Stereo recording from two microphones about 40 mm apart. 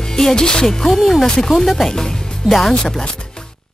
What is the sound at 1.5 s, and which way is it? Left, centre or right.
Speech, centre.